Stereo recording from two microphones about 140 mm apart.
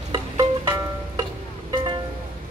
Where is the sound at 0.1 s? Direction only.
30° right (ahead or behind).